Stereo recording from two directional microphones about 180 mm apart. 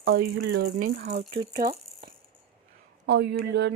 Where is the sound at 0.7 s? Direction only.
55° right (ahead or behind).